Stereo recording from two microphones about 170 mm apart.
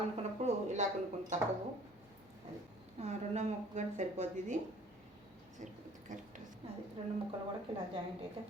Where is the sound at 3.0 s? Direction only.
40° right (ahead or behind).